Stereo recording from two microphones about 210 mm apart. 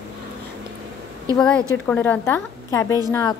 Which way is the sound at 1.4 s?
5° left (ahead or behind).